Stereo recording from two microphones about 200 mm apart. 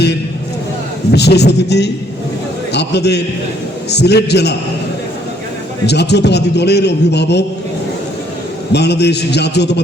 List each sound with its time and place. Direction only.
1.1 s a man's voice: 55° left (ahead or behind)
5.8 s a man's voice: 55° left (ahead or behind)
8.7 s a man's voice: 55° left (ahead or behind)